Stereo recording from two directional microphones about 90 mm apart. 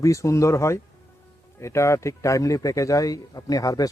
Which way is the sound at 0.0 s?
35° left (ahead or behind).